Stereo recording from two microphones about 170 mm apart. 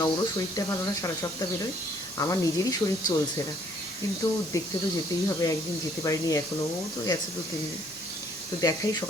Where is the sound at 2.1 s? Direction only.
20° left (ahead or behind).